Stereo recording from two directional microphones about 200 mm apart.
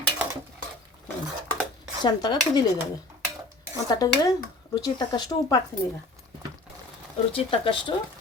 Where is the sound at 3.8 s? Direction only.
20° left (ahead or behind).